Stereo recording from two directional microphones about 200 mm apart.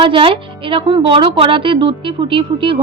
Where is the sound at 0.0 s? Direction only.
25° right (ahead or behind).